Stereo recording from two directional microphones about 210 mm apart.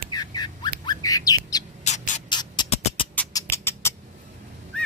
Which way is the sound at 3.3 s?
10° left (ahead or behind).